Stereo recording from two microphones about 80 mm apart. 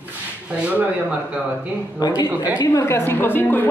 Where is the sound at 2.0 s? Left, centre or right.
Left.